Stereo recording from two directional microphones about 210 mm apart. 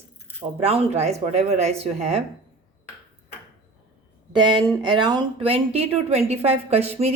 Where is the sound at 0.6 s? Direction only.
30° right (ahead or behind).